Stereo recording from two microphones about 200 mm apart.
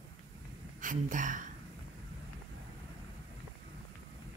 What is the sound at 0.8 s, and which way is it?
Speech, 40° right (ahead or behind).